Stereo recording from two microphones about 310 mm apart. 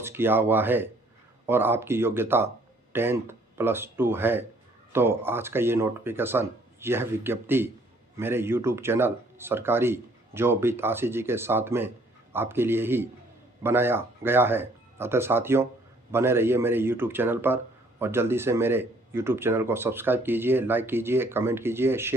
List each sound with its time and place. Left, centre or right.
0.0 s speech: centre